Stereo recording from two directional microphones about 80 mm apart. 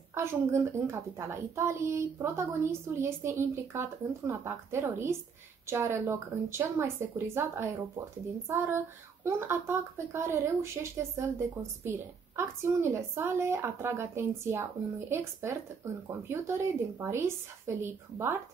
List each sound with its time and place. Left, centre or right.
0.1 s a woman's voice: right